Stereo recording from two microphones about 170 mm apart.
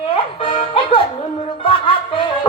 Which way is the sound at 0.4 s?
35° left (ahead or behind).